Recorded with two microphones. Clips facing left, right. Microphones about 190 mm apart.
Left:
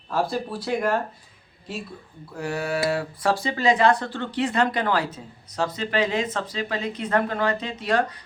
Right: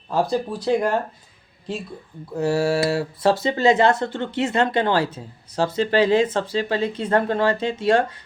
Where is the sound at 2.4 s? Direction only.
30° right (ahead or behind).